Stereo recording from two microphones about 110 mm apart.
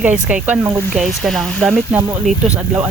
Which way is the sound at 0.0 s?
10° right (ahead or behind).